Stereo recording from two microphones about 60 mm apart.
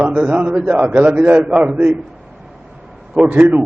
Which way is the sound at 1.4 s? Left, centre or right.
Centre.